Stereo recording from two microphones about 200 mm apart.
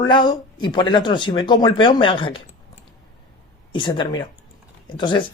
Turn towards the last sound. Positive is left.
turn(degrees=25)  # may be behind; listen again after turning